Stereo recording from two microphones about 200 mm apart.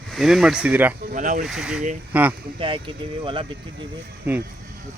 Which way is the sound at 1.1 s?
40° right (ahead or behind).